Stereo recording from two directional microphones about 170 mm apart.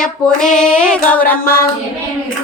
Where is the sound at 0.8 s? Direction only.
5° left (ahead or behind).